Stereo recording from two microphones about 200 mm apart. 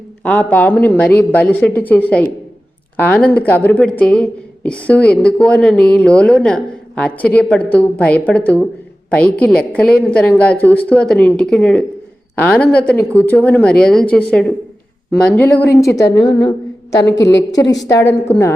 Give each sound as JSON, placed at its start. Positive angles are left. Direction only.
{"t": 0.2, "sound": "a woman's voice", "side_deg": 5}
{"t": 17.5, "sound": "a woman's voice", "side_deg": 20}